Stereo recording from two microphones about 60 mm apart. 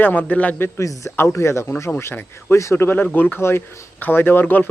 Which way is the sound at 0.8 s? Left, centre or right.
Left.